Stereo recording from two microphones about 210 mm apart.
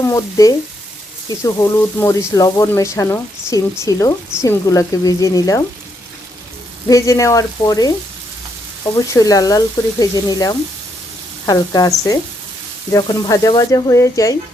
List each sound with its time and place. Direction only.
0.0 s speech: 15° left (ahead or behind)
6.8 s speech: 15° left (ahead or behind)
9.1 s speech: 15° left (ahead or behind)